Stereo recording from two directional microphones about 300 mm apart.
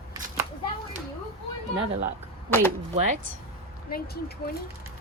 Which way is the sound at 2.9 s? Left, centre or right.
Right.